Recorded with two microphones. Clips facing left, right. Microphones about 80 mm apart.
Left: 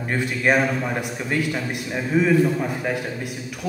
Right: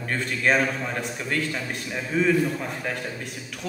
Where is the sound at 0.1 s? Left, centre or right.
Centre.